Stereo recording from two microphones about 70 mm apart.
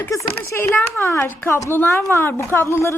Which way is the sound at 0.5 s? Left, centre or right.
Left.